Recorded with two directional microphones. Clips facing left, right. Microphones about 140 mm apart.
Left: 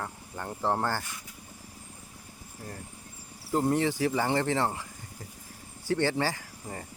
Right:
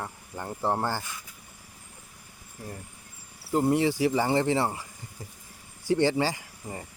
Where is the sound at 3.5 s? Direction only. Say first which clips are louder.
Right 2 dB; 10° right (ahead or behind).